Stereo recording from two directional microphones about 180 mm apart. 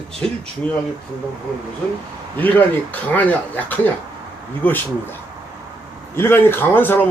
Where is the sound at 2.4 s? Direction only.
10° left (ahead or behind).